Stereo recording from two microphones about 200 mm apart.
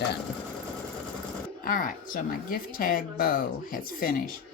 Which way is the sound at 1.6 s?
40° left (ahead or behind).